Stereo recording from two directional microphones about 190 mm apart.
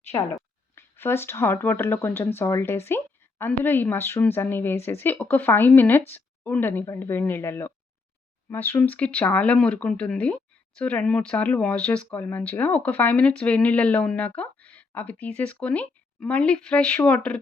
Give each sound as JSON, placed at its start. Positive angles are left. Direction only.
{"t": 0.8, "sound": "speech", "side_deg": 10}